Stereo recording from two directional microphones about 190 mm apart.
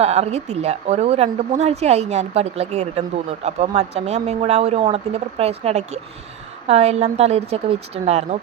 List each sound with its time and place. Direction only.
0.0 s a woman's voice: 35° right (ahead or behind)